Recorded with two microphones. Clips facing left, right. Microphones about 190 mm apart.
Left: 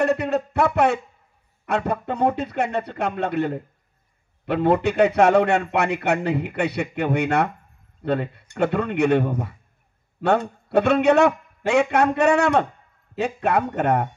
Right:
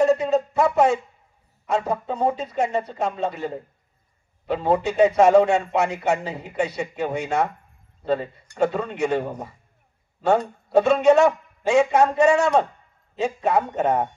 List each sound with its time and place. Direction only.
0.0 s a man's voice: 65° left (ahead or behind)